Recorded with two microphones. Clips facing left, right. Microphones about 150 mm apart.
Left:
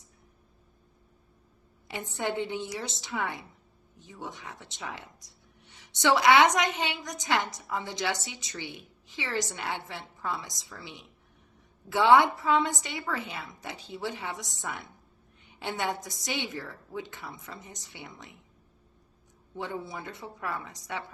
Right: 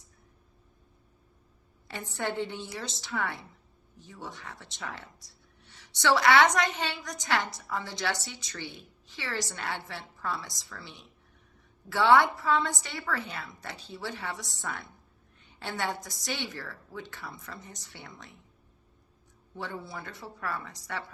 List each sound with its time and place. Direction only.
1.9 s speech: 15° left (ahead or behind)
19.5 s speech: 15° left (ahead or behind)